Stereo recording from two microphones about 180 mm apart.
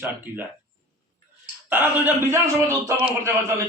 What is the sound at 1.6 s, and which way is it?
A man's voice, 10° right (ahead or behind).